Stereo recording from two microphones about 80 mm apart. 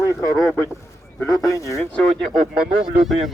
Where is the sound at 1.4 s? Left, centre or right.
Left.